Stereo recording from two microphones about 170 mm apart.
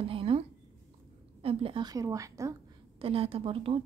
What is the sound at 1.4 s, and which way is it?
A woman's voice, 35° right (ahead or behind).